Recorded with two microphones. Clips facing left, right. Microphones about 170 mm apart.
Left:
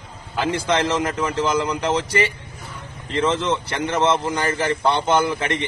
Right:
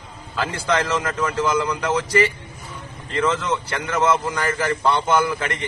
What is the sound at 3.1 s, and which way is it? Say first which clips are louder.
A man's voice: left 1 dB; 25° left (ahead or behind).